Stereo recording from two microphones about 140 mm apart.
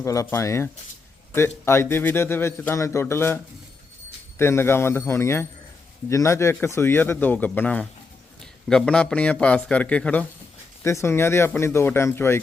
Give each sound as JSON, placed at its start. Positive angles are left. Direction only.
{"t": 0.0, "sound": "a man's voice", "side_deg": 20}